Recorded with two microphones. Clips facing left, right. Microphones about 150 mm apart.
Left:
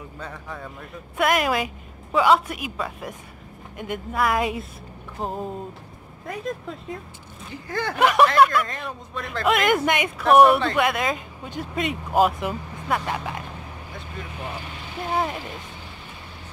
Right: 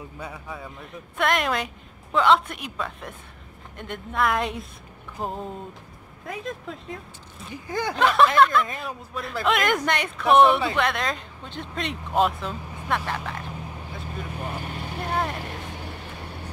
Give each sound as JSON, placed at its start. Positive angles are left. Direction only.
{"t": 0.2, "sound": "speech", "side_deg": -5}
{"t": 7.5, "sound": "speech", "side_deg": -15}
{"t": 7.9, "sound": "speech", "side_deg": 15}
{"t": 8.6, "sound": "speech", "side_deg": -10}
{"t": 14.5, "sound": "speech", "side_deg": -50}
{"t": 15.0, "sound": "speech", "side_deg": 5}